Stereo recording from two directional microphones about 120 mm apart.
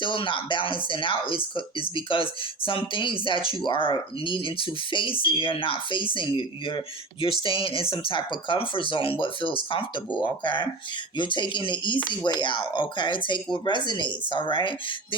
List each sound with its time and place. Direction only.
0.0 s speech: 45° left (ahead or behind)